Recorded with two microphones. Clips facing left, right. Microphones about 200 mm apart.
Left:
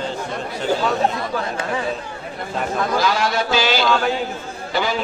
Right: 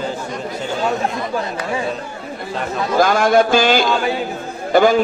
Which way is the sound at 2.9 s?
50° right (ahead or behind).